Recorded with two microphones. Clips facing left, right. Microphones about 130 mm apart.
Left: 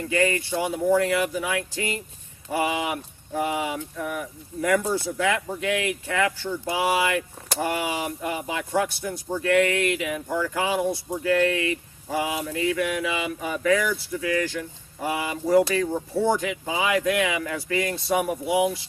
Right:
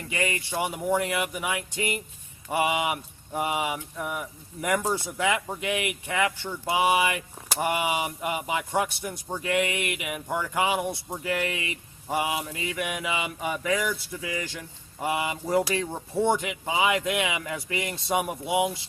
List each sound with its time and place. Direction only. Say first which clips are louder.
0.1 s speech: left 6 dB; 20° right (ahead or behind)